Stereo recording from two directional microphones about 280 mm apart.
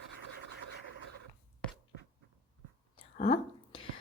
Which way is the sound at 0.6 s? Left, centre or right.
Left.